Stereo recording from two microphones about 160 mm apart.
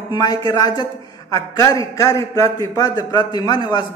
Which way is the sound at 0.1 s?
25° left (ahead or behind).